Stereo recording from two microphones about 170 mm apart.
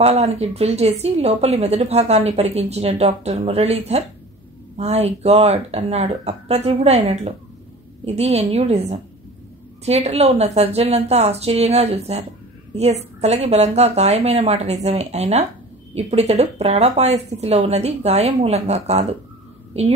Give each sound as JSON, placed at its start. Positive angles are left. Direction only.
{"t": 0.0, "sound": "a woman's voice", "side_deg": -40}